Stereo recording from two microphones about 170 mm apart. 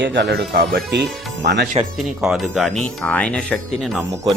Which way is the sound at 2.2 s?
Centre (ahead or behind).